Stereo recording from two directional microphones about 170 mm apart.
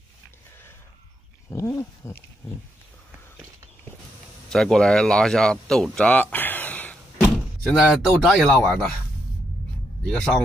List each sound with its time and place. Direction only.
1.5 s roaring cats: 15° left (ahead or behind)
4.5 s speech: 5° left (ahead or behind)
6.3 s door: 10° left (ahead or behind)
10.1 s roaring cats: 5° left (ahead or behind)